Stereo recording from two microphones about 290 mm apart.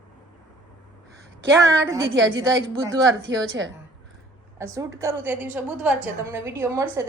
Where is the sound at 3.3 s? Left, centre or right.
Right.